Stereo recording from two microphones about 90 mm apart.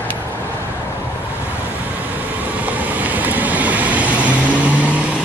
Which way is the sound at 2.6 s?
20° right (ahead or behind).